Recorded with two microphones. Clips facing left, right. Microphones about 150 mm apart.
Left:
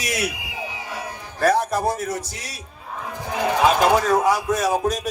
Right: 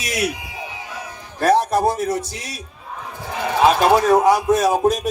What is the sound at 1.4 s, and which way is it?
A man's voice, 25° right (ahead or behind).